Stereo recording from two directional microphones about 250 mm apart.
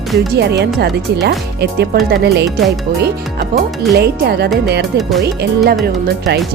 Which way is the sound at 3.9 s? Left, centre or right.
Right.